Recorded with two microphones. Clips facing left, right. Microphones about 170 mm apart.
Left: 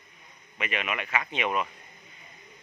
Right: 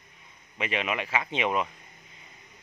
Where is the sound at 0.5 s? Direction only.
25° right (ahead or behind).